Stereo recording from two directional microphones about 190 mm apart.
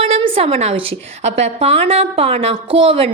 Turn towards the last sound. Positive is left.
turn(degrees=-30)  # may be behind; listen again after turning